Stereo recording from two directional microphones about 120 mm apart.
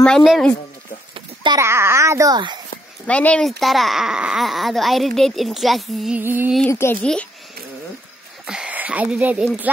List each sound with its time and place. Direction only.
0.0 s speech: centre (ahead or behind)
1.1 s a sound: 40° right (ahead or behind)
1.6 s a child's voice: 20° right (ahead or behind); by 2.6 s 35° right (ahead or behind)
3.1 s speech: 10° left (ahead or behind)
6.1 s music: 15° right (ahead or behind)
6.7 s speech: 20° left (ahead or behind)
8.5 s speech: 10° right (ahead or behind)